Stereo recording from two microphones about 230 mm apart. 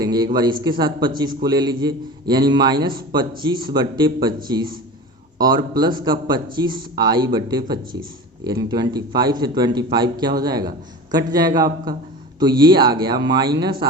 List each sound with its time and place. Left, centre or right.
0.0 s a sound: centre
0.6 s a man's voice: centre
5.4 s a man's voice: centre